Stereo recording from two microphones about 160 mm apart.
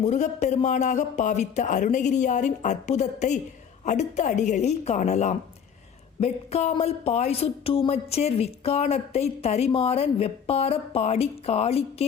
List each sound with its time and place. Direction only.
0.0 s speech: 45° left (ahead or behind)